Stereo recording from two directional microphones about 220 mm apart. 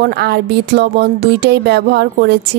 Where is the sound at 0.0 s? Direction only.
50° right (ahead or behind).